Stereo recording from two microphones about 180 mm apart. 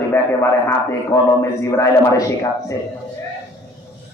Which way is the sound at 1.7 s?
15° left (ahead or behind).